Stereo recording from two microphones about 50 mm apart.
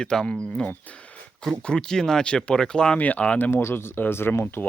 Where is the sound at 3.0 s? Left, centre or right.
Left.